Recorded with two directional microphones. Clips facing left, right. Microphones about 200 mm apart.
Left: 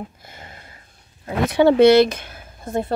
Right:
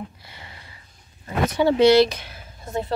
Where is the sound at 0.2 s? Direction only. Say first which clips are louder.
Left 3 dB; 45° left (ahead or behind).